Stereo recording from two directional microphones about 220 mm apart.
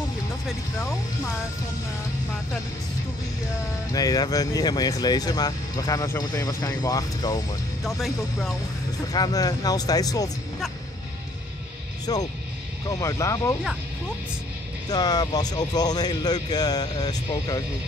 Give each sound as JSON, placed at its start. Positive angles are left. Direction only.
{"t": 3.9, "sound": "speech", "side_deg": 15}
{"t": 9.1, "sound": "speech", "side_deg": 15}
{"t": 12.1, "sound": "speech", "side_deg": 20}
{"t": 14.9, "sound": "speech", "side_deg": 20}